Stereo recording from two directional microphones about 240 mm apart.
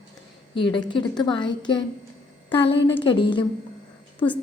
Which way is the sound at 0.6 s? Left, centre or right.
Centre.